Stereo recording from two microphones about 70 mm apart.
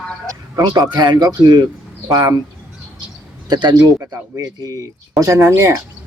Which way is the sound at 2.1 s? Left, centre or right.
Right.